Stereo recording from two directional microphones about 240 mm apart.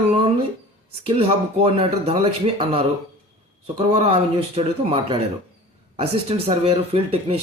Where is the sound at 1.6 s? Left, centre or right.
Right.